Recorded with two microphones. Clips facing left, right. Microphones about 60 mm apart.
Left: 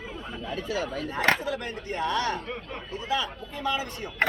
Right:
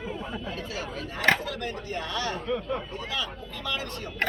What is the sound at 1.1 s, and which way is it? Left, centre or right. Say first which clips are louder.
A man's voice: even; left.